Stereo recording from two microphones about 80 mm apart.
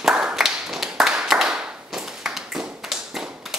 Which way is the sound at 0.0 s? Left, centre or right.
Centre.